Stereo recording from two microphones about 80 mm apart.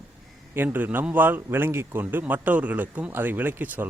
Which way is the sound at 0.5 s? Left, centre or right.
Right.